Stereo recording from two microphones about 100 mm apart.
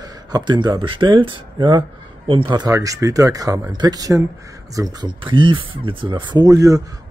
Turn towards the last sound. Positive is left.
turn(degrees=-35)  # may be behind; listen again after turning